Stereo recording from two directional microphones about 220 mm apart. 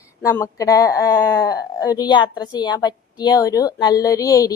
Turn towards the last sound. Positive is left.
turn(degrees=15)  # may be behind; listen again after turning